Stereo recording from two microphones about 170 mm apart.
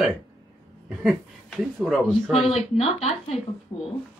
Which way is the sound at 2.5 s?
40° left (ahead or behind).